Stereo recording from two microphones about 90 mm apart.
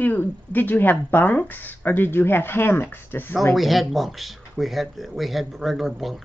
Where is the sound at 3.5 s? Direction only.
Centre (ahead or behind).